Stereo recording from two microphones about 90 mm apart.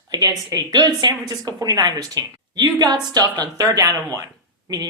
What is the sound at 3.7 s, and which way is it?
Speech, 35° right (ahead or behind).